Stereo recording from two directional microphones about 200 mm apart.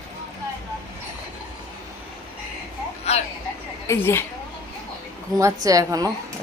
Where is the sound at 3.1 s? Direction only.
30° left (ahead or behind).